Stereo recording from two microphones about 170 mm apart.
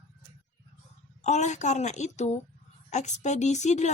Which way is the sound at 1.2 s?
45° left (ahead or behind).